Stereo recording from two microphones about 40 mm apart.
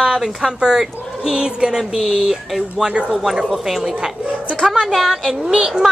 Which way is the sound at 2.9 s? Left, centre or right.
Right.